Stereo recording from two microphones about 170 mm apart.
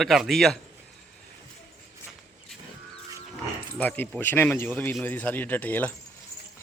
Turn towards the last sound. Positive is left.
turn(degrees=10)  # may be behind; listen again after turning